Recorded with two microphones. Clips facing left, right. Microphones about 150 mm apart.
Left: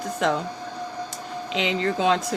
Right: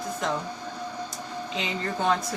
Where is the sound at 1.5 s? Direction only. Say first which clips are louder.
Left 8 dB; 85° left.